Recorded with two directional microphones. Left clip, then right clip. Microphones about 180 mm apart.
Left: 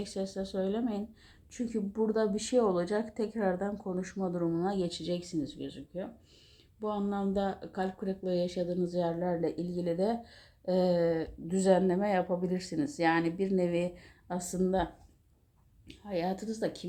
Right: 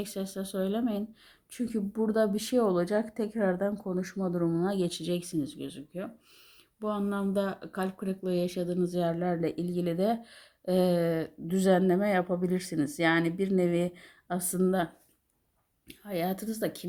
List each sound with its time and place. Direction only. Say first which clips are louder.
0.0 s speech: even; 50° right (ahead or behind)
15.9 s speech: right 1 dB; 45° right (ahead or behind)